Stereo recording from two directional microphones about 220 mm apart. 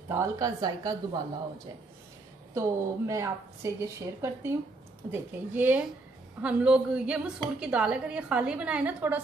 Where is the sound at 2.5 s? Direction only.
15° right (ahead or behind).